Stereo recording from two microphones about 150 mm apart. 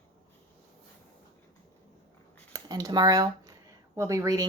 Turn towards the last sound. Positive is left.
turn(degrees=-25)  # may be behind; listen again after turning